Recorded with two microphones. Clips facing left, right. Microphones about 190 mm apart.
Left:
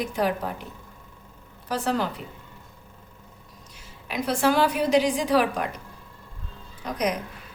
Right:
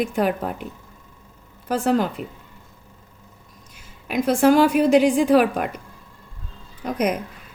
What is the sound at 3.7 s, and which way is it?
A woman's voice, 50° right (ahead or behind).